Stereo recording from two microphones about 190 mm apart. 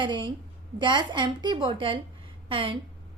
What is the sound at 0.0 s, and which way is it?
A woman's voice, 25° right (ahead or behind).